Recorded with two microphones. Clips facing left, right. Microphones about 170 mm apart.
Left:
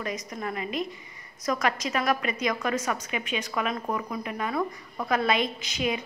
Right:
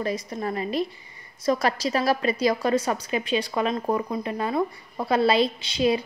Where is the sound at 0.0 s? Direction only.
30° right (ahead or behind).